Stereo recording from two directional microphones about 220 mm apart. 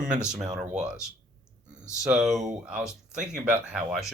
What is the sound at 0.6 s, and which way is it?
Speech, 30° right (ahead or behind).